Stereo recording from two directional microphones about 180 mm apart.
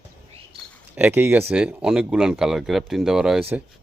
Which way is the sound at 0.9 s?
10° right (ahead or behind).